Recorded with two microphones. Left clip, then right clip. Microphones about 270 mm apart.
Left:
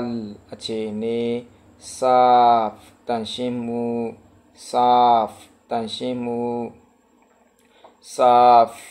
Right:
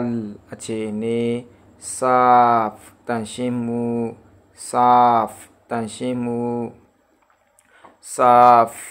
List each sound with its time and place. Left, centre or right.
0.0 s speech: right
8.2 s speech: right